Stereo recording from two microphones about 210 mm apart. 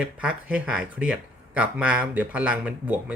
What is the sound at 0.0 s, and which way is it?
Speech, 5° right (ahead or behind).